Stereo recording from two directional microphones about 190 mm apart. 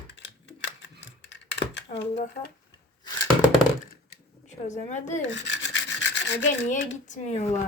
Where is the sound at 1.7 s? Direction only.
65° left (ahead or behind).